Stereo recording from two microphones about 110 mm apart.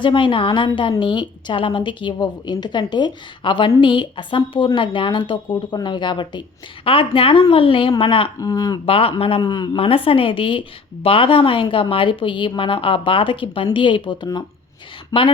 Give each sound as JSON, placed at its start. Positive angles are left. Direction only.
{"t": 0.0, "sound": "a woman's voice", "side_deg": 50}
{"t": 6.8, "sound": "a woman's voice", "side_deg": 55}
{"t": 8.4, "sound": "speech", "side_deg": 35}
{"t": 8.9, "sound": "speech", "side_deg": 55}
{"t": 9.4, "sound": "speech", "side_deg": 40}
{"t": 9.7, "sound": "a woman's voice", "side_deg": 55}
{"t": 15.1, "sound": "speech", "side_deg": 30}